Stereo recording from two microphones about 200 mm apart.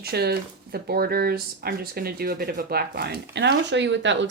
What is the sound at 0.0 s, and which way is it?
Speech, 50° right (ahead or behind).